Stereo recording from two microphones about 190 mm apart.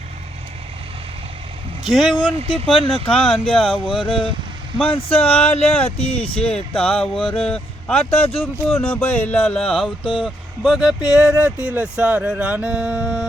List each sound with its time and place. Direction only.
1.8 s speech: centre (ahead or behind)
2.4 s speech: 30° right (ahead or behind)
3.1 s speech: 5° left (ahead or behind)
4.8 s speech: 30° left (ahead or behind)
7.0 s speech: 5° left (ahead or behind)
7.9 s speech: 35° left (ahead or behind)
9.0 s a sound: 10° left (ahead or behind)
10.0 s speech: 25° left (ahead or behind)
10.2 s speech: centre (ahead or behind)